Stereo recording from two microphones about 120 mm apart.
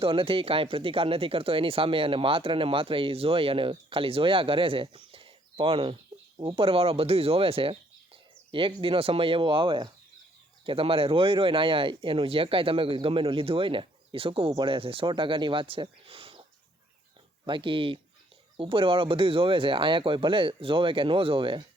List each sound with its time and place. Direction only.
0.0 s speech: 50° right (ahead or behind)
17.4 s speech: 45° right (ahead or behind)